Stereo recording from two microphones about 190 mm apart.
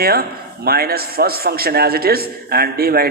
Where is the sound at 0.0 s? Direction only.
55° right (ahead or behind).